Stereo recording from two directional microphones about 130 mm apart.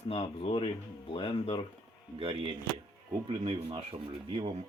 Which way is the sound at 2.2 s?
45° right (ahead or behind).